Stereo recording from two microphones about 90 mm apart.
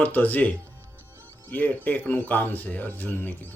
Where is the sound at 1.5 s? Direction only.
20° left (ahead or behind).